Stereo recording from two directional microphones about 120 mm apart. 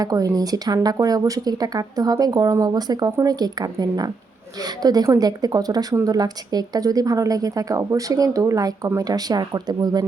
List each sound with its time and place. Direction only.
0.0 s speech: 30° right (ahead or behind)